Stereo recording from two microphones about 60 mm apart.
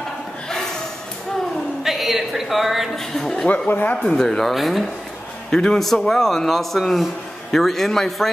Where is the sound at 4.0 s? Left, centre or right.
Centre.